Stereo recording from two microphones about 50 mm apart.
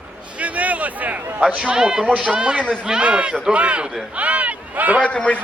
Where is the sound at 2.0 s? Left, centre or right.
Right.